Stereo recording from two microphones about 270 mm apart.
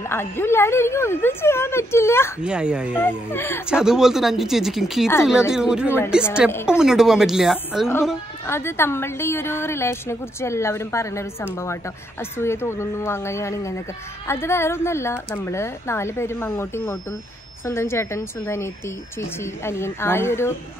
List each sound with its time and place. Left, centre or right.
0.1 s a woman's voice: centre
2.4 s speech: centre
3.0 s a woman's voice: centre
3.6 s speech: centre
6.5 s a woman's voice: centre
6.8 s speech: centre
8.5 s a woman's voice: centre